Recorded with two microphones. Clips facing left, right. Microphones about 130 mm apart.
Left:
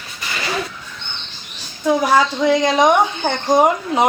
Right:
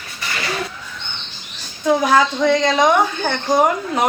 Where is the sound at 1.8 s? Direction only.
10° left (ahead or behind).